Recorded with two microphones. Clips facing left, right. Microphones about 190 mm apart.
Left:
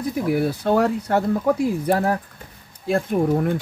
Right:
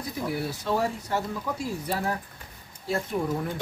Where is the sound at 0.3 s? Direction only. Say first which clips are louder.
Left 9 dB; 60° left (ahead or behind).